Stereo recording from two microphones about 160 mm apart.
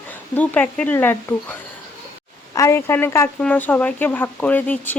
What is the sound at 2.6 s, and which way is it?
Speech, 15° left (ahead or behind).